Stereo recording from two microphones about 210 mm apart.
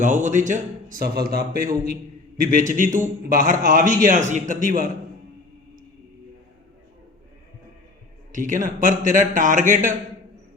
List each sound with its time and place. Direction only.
0.0 s a man's voice: 35° right (ahead or behind)
8.3 s a man's voice: 40° right (ahead or behind)